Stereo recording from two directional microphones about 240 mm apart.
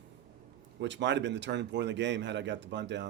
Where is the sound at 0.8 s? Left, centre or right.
Right.